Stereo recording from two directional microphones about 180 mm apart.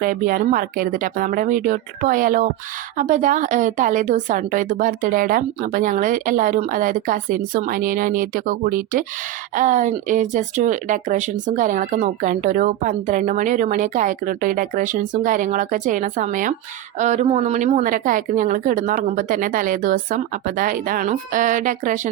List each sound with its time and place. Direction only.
0.0 s speech: 50° right (ahead or behind)